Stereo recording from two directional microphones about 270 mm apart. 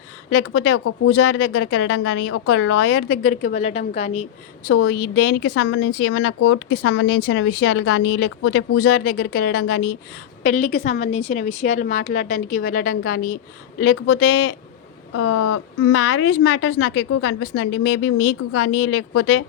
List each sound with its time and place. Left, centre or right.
0.3 s speech: left
0.7 s speech: left
2.9 s a woman's voice: left
4.7 s a woman's voice: left
9.0 s a woman's voice: left
15.1 s a woman's voice: left